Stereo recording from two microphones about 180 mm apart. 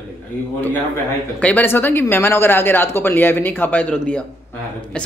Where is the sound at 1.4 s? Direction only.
10° left (ahead or behind).